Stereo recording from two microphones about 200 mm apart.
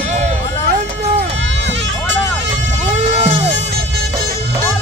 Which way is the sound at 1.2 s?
60° right (ahead or behind).